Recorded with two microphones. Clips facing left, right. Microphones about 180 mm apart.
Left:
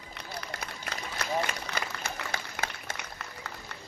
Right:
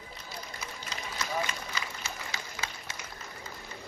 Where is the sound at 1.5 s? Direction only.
60° left (ahead or behind).